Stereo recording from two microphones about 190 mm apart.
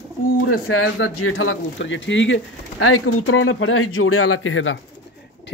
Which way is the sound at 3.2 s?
90° left.